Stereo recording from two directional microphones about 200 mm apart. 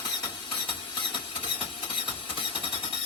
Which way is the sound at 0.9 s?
25° left (ahead or behind).